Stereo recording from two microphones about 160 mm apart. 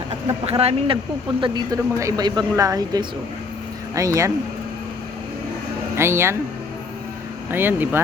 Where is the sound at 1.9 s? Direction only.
20° right (ahead or behind).